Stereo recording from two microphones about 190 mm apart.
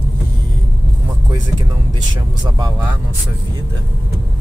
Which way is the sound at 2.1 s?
20° right (ahead or behind).